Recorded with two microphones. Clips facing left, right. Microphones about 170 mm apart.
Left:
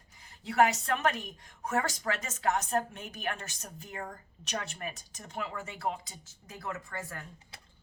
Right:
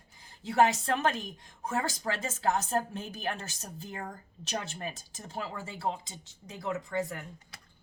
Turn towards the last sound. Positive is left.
turn(degrees=-20)  # may be behind; listen again after turning